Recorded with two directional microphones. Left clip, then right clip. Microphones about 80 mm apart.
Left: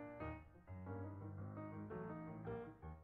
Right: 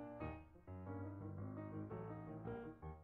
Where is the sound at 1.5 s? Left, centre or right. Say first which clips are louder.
Left 1 dB; centre.